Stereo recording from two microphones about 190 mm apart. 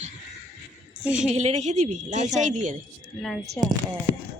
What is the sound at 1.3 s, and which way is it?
A woman's voice, 35° right (ahead or behind).